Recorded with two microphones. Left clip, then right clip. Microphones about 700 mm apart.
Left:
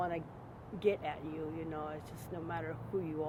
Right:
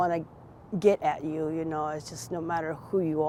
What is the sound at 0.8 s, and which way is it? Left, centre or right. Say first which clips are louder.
Speech: right 10 dB; right.